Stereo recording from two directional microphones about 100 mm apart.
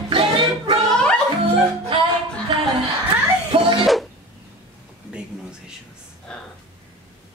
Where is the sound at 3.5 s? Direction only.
65° right (ahead or behind).